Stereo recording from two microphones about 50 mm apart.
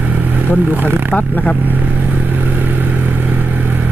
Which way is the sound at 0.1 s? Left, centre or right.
Right.